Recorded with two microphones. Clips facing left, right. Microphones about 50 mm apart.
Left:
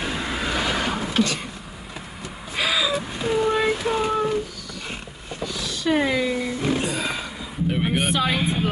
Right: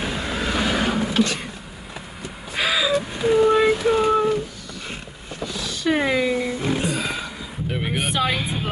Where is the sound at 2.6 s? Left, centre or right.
Right.